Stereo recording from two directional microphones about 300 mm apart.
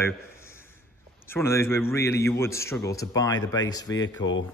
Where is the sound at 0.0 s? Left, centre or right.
Centre.